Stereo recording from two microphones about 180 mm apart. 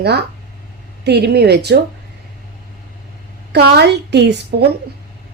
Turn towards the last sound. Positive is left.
turn(degrees=-70)  # may be behind; listen again after turning